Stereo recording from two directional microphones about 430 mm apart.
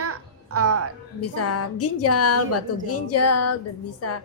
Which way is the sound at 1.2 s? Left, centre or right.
Left.